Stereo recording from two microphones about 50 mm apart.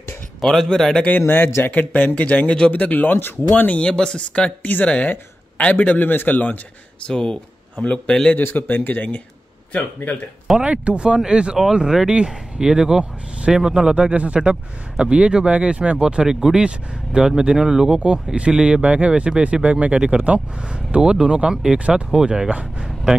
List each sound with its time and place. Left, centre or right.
0.4 s speech: centre
1.2 s speech: left
1.7 s speech: left
3.8 s speech: centre
5.6 s speech: left
7.1 s speech: centre
8.4 s speech: left
10.6 s speech: right
18.0 s speech: right
18.8 s speech: right